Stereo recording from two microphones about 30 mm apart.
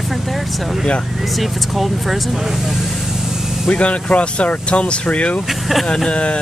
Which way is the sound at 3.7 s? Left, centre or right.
Left.